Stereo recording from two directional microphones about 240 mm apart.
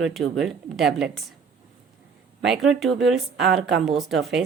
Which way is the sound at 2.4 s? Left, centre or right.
Centre.